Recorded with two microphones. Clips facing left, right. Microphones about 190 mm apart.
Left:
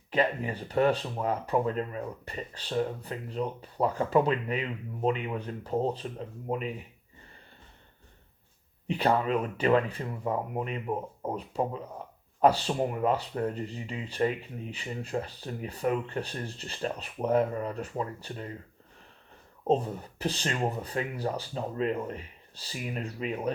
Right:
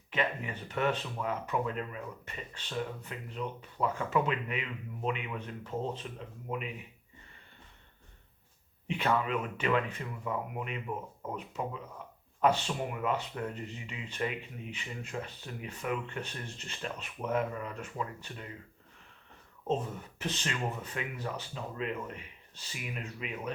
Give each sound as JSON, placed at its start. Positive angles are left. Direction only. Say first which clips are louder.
{"t": 0.1, "sound": "speech", "louder": "left 6 dB", "side_deg": 35}
{"t": 8.9, "sound": "speech", "louder": "left 4 dB", "side_deg": 35}
{"t": 19.6, "sound": "speech", "louder": "left 6 dB", "side_deg": 35}